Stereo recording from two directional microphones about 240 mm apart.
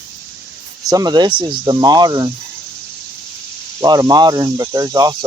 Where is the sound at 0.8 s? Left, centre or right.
Centre.